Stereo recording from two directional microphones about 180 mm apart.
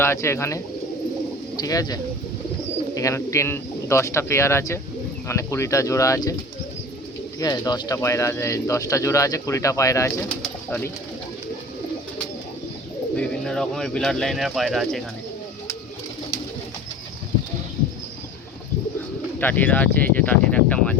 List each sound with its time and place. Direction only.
0.0 s speech: 15° left (ahead or behind)
7.3 s speech: 20° left (ahead or behind)
13.1 s speech: 5° left (ahead or behind)
19.4 s speech: 10° left (ahead or behind)